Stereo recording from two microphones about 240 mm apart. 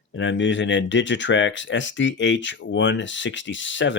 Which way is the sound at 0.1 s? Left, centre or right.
Left.